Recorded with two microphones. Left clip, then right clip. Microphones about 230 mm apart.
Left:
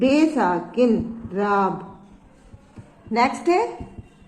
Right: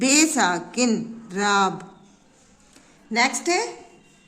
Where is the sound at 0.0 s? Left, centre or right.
Right.